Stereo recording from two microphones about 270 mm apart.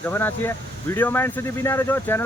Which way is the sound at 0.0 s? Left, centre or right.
Centre.